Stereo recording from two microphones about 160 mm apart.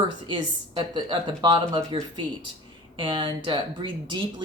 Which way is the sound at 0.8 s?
30° right (ahead or behind).